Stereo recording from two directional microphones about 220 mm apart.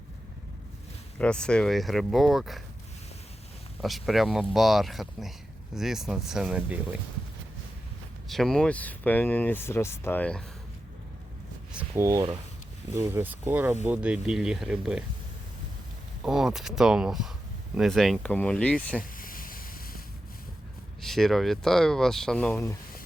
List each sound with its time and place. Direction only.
1.2 s speech: 5° left (ahead or behind)
3.8 s speech: centre (ahead or behind)
8.3 s speech: centre (ahead or behind)
11.7 s speech: 10° right (ahead or behind)
16.2 s speech: 5° right (ahead or behind)
19.1 s ocean: 40° left (ahead or behind)
21.0 s speech: centre (ahead or behind)